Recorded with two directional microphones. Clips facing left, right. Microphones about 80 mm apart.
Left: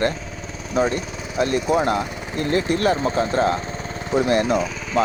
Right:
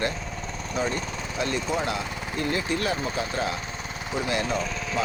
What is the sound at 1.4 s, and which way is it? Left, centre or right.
Speech, left.